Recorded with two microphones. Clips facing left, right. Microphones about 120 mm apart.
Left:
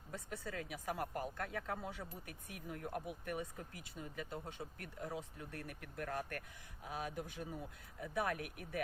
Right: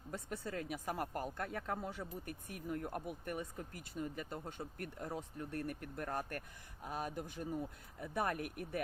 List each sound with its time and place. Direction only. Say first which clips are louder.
0.1 s speech: right 3 dB; 45° right (ahead or behind)
8.1 s speech: right 1 dB; 45° right (ahead or behind)